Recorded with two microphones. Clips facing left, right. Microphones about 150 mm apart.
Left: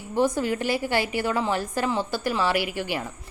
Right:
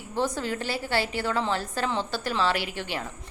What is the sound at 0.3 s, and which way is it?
A woman's voice, 15° left (ahead or behind).